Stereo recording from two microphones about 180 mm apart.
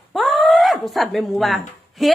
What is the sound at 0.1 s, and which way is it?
Speech, centre (ahead or behind).